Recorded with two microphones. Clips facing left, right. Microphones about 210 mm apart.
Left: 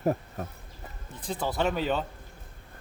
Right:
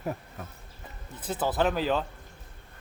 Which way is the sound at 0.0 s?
45° left (ahead or behind).